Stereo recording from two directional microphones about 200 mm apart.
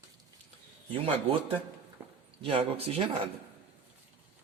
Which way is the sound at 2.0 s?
10° right (ahead or behind).